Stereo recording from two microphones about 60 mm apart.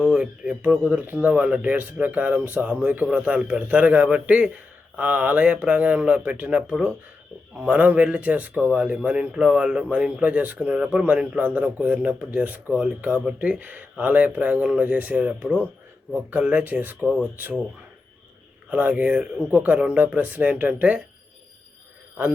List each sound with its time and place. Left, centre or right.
0.0 s speech: centre
18.7 s speech: right